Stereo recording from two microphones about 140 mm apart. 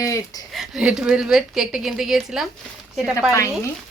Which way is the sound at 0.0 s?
25° left (ahead or behind).